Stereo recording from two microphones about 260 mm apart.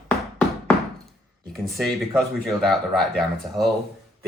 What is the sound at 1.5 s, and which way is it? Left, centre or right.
Speech, centre.